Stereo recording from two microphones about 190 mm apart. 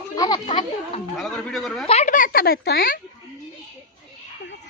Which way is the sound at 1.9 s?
40° left (ahead or behind).